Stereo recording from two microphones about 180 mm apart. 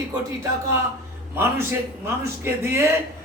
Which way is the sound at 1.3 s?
10° right (ahead or behind).